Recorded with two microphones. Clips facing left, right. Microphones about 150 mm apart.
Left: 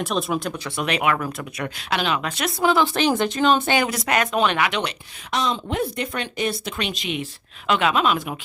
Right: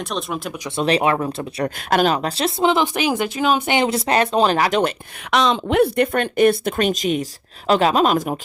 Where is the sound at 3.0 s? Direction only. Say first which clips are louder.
Even; 10° right (ahead or behind); by 4.9 s 45° right (ahead or behind).